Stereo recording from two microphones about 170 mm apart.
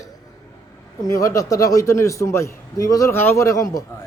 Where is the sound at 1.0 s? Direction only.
20° left (ahead or behind).